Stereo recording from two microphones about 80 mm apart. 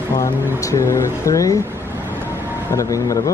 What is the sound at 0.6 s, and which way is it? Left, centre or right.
Speech, left.